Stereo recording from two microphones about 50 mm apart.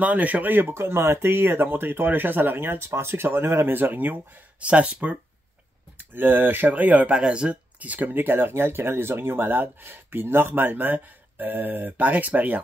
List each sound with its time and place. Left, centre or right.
0.0 s speech: right
0.7 s speech: right
4.6 s speech: right
5.9 s speech: right
7.2 s speech: centre
7.8 s speech: right